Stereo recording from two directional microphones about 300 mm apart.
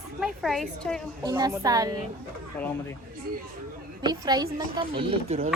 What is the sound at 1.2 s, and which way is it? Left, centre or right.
Speech, centre.